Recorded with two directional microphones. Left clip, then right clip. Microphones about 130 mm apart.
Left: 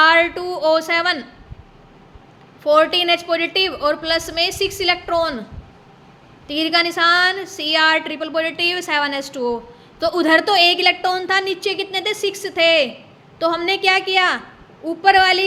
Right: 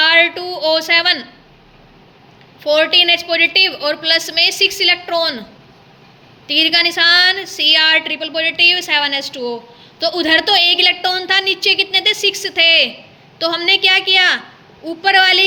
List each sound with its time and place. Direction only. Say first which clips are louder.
0.0 s a sound: right 2 dB; 35° left (ahead or behind)
2.6 s a woman's voice: right 3 dB; 35° left (ahead or behind)
6.5 s a woman's voice: right 5 dB; 30° left (ahead or behind)